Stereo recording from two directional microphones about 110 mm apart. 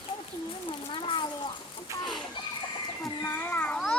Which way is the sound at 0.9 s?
50° left (ahead or behind).